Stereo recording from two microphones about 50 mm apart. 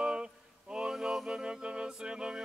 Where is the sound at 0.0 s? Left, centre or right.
Centre.